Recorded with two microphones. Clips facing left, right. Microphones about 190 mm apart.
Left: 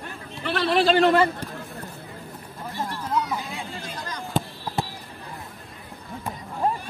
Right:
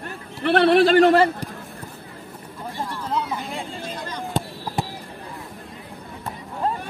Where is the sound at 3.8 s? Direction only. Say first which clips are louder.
Right 3 dB; 30° right (ahead or behind).